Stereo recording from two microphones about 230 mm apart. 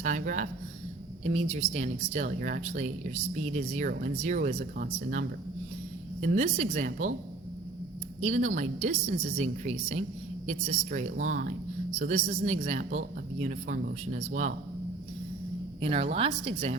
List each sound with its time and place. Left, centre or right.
0.0 s speech: right
1.5 s speech: right
8.2 s a man's voice: right
15.8 s a man's voice: right